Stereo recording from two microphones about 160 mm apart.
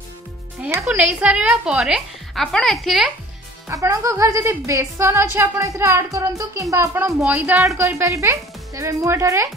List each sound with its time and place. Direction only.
0.8 s a woman's voice: 5° right (ahead or behind)
3.6 s a woman's voice: 20° right (ahead or behind)